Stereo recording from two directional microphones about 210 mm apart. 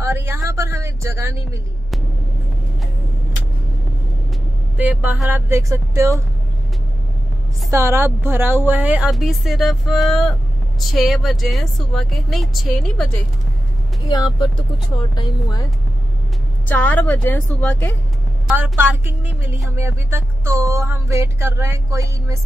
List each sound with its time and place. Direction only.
0.0 s a sound: 10° right (ahead or behind)
4.7 s speech: 5° right (ahead or behind)
7.7 s speech: 10° right (ahead or behind)
14.0 s speech: 20° left (ahead or behind)
16.6 s speech: 10° left (ahead or behind)
18.6 s speech: 10° right (ahead or behind)